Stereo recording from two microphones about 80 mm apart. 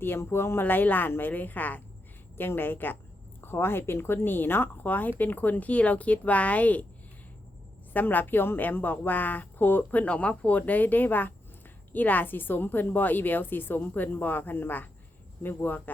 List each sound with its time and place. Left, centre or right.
0.0 s speech: left
7.9 s speech: left